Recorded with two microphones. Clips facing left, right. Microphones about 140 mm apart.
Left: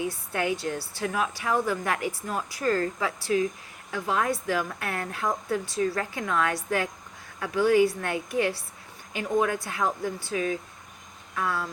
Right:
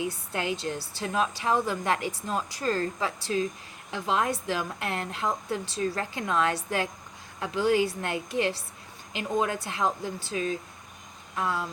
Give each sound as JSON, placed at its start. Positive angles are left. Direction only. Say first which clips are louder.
{"t": 0.3, "sound": "a woman's voice", "louder": "left 3 dB", "side_deg": -25}